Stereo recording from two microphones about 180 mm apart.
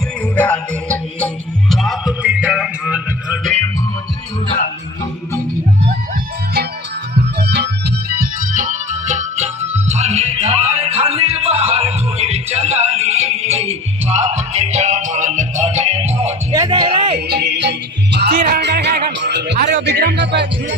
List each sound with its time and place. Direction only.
0.3 s music: 5° left (ahead or behind)
7.3 s music: 65° right (ahead or behind); by 16.3 s 35° right (ahead or behind)
16.5 s music: 20° right (ahead or behind)
17.2 s music: 65° right (ahead or behind)
19.2 s a sound: 70° right (ahead or behind)
19.8 s music: 70° right (ahead or behind)